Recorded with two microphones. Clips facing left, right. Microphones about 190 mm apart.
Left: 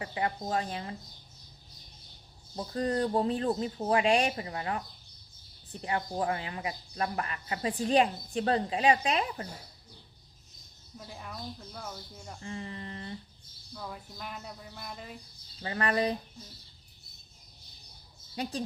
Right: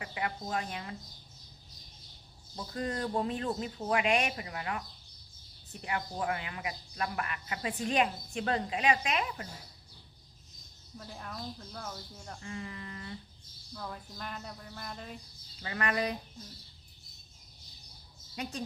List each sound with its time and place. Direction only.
0.0 s speech: 30° left (ahead or behind)
2.6 s speech: 35° left (ahead or behind)
5.8 s speech: 30° left (ahead or behind)
10.9 s speech: 5° left (ahead or behind)
12.4 s speech: 30° left (ahead or behind)
13.7 s speech: 5° left (ahead or behind)
15.6 s speech: 30° left (ahead or behind)
18.4 s speech: 35° left (ahead or behind)